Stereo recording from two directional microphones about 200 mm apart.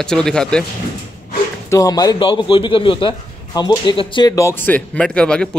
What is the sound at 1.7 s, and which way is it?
A man's voice, 20° left (ahead or behind).